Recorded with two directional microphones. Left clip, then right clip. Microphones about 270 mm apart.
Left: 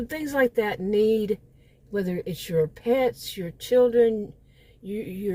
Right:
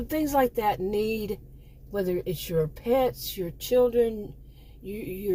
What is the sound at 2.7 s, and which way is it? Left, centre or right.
Speech, left.